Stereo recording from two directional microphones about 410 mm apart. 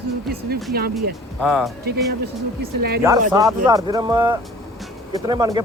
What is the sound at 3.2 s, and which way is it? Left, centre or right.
Speech, centre.